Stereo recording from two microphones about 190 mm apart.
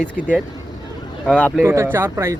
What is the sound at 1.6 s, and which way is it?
Speech, 15° right (ahead or behind).